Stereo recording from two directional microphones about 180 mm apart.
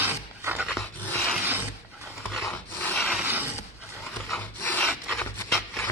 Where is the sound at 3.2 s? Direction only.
10° right (ahead or behind).